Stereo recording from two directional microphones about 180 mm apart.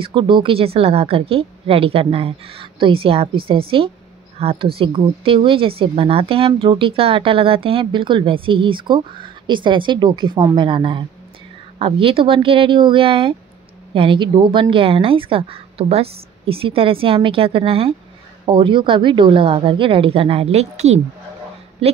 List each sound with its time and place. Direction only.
0.0 s a woman's voice: 30° right (ahead or behind)